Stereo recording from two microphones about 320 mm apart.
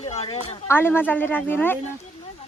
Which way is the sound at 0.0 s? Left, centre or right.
Centre.